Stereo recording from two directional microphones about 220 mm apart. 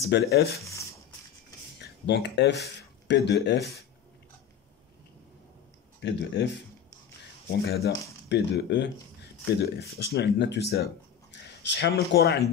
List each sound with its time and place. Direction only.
0.0 s speech: 45° left (ahead or behind)
0.6 s speech: 15° left (ahead or behind)
1.8 s speech: 50° left (ahead or behind)
5.9 s speech: 50° left (ahead or behind)
7.6 s speech: 45° left (ahead or behind)